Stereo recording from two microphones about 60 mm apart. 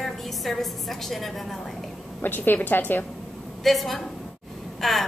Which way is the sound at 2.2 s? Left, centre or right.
Left.